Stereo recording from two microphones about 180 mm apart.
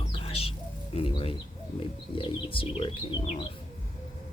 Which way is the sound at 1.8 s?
30° left (ahead or behind).